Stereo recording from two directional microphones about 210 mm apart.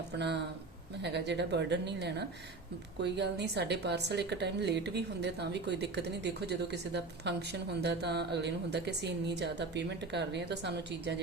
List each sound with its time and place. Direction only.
1.0 s a woman's voice: 55° right (ahead or behind)